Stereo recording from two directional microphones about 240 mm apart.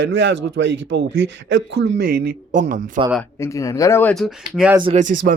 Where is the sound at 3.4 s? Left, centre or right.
Centre.